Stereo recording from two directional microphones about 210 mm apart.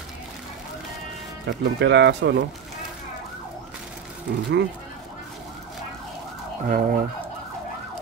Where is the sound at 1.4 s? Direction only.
55° right (ahead or behind).